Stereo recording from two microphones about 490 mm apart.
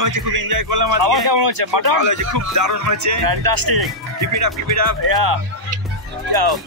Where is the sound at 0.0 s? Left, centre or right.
Right.